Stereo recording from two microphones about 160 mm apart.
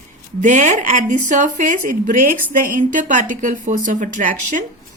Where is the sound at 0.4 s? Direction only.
50° right (ahead or behind).